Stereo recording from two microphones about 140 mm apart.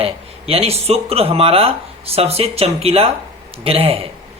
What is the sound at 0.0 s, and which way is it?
Speech, 45° right (ahead or behind).